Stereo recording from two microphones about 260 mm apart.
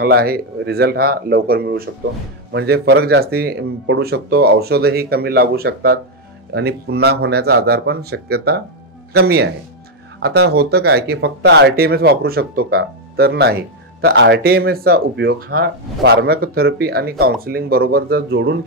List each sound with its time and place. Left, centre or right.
0.0 s speech: right